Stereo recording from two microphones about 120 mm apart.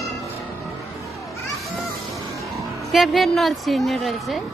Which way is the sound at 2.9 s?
Centre (ahead or behind).